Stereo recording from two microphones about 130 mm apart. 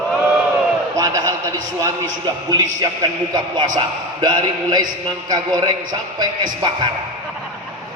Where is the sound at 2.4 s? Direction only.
30° right (ahead or behind).